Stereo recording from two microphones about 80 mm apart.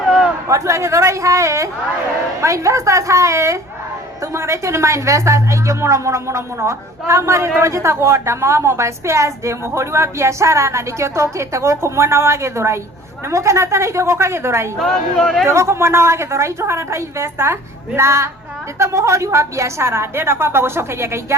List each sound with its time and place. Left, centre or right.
0.4 s a woman's voice: right
14.8 s speech: centre
15.4 s a woman's voice: right